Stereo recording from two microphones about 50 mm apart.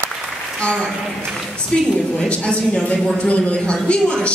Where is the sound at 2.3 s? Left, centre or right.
Left.